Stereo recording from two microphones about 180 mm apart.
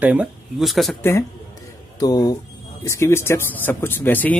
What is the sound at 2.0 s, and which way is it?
Speech, 20° left (ahead or behind).